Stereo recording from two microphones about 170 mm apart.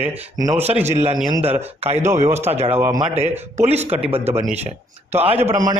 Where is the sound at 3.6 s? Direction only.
40° right (ahead or behind).